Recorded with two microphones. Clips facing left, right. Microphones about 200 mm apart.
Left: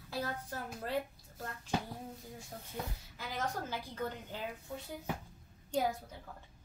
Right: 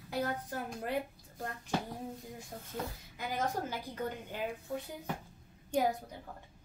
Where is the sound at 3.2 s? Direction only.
15° right (ahead or behind).